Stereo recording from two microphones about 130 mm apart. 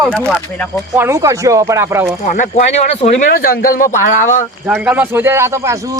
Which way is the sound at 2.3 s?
65° left (ahead or behind).